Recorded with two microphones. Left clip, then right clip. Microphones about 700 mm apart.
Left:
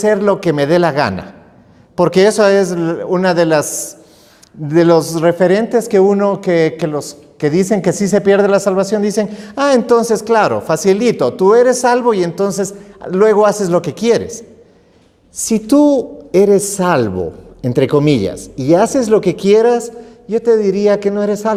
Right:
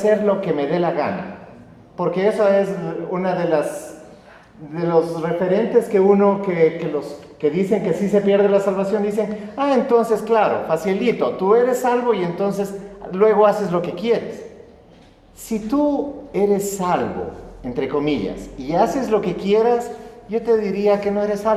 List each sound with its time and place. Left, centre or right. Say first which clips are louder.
0.0 s speech: left 5 dB; left
4.7 s a man's voice: left 8 dB; left
15.4 s a man's voice: left 9 dB; left